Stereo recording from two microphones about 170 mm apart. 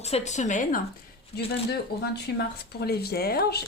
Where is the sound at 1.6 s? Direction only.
75° left (ahead or behind).